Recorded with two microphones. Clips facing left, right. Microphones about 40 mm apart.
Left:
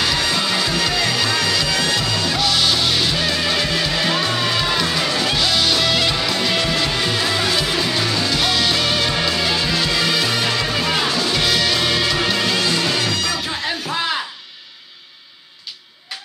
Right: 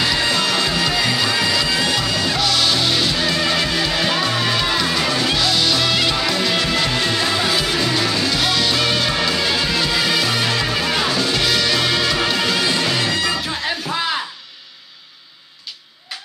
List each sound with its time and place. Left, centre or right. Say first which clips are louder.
0.0 s music: right 1 dB; centre
2.1 s music: even; centre
13.0 s music: right 1 dB; right